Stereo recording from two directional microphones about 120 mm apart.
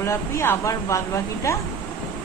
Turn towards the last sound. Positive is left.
turn(degrees=25)  # may be behind; listen again after turning